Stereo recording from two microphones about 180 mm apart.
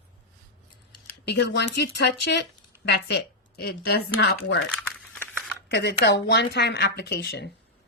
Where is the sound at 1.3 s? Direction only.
70° left (ahead or behind).